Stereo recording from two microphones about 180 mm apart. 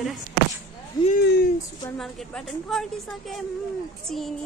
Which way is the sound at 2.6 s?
Centre (ahead or behind).